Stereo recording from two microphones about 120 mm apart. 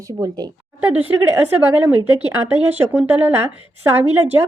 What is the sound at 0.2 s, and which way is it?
Speech, 30° right (ahead or behind).